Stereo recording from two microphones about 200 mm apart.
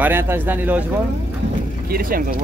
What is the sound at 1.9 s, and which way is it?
Speech, 45° right (ahead or behind).